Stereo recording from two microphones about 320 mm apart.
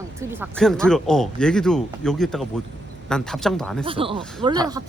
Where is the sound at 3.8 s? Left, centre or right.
Centre.